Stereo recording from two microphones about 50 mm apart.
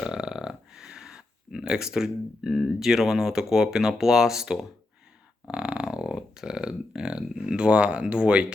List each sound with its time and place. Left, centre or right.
0.0 s a sound: centre
2.7 s speech: centre
5.5 s dog: right
6.1 s speech: centre